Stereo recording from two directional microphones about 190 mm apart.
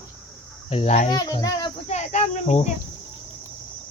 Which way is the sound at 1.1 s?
20° left (ahead or behind).